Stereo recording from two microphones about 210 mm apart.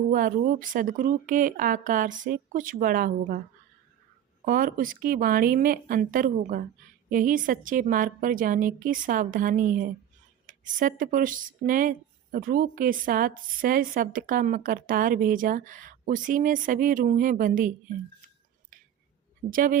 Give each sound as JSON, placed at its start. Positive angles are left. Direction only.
{"t": 0.1, "sound": "speech", "side_deg": -40}
{"t": 4.4, "sound": "speech", "side_deg": -40}
{"t": 19.5, "sound": "speech", "side_deg": -40}